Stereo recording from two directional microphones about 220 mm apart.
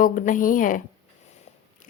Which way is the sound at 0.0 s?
35° left (ahead or behind).